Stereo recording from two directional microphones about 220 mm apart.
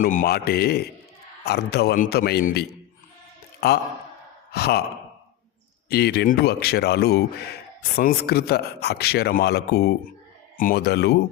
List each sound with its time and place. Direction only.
0.0 s speech: 40° left (ahead or behind)
5.9 s speech: 45° left (ahead or behind)